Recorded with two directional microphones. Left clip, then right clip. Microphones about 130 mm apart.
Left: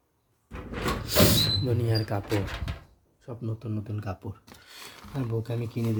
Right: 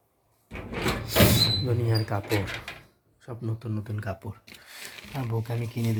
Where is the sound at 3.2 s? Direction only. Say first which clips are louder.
Right 1 dB; 25° left (ahead or behind).